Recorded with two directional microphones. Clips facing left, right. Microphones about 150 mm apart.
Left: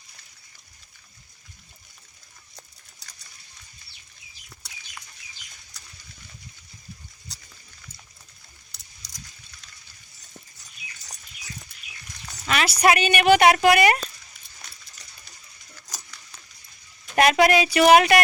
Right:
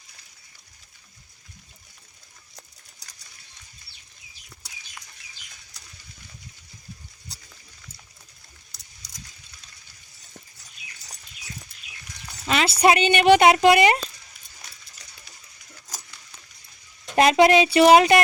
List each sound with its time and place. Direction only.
12.5 s speech: 25° right (ahead or behind)
17.2 s speech: 25° right (ahead or behind)